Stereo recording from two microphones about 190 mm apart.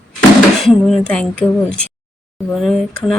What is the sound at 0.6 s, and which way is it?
Speech, centre (ahead or behind).